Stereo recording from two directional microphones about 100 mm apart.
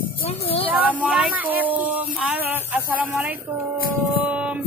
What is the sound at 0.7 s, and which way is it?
Speech, 15° right (ahead or behind).